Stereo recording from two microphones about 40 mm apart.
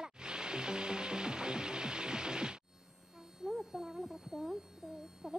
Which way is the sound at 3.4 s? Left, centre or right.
Centre.